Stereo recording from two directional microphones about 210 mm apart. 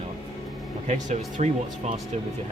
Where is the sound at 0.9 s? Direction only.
35° right (ahead or behind).